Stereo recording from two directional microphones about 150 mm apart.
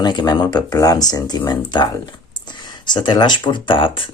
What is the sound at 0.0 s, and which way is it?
Speech, 30° left (ahead or behind).